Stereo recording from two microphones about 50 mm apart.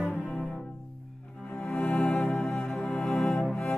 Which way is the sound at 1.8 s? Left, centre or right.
Left.